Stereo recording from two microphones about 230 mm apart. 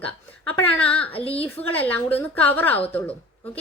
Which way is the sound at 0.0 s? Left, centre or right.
Centre.